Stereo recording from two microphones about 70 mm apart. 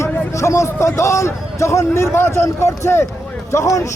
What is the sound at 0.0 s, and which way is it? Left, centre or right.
A man's voice, left.